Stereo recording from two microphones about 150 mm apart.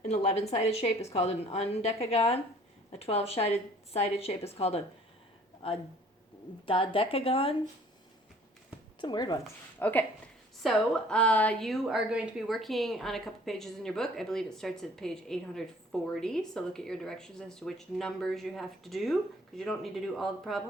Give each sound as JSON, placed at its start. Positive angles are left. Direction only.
{"t": 0.1, "sound": "a woman's voice", "side_deg": 45}
{"t": 6.7, "sound": "a woman's voice", "side_deg": 35}
{"t": 9.0, "sound": "speech", "side_deg": 30}
{"t": 9.7, "sound": "a woman's voice", "side_deg": 10}